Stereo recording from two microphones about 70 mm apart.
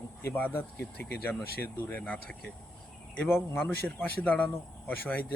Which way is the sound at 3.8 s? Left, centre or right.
Left.